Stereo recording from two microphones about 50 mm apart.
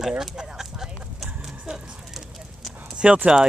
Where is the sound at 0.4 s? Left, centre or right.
Centre.